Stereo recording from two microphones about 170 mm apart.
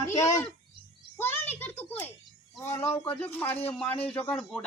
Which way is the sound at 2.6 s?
15° left (ahead or behind).